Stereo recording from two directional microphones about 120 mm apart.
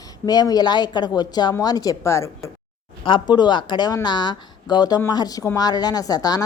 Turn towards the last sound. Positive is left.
turn(degrees=30)  # may be behind; listen again after turning